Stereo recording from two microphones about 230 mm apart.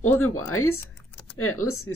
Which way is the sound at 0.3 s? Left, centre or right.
Left.